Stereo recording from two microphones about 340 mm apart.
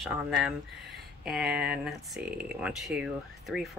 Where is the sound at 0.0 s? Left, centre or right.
Centre.